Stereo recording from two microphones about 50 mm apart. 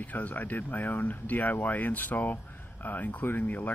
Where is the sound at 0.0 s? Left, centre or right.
Left.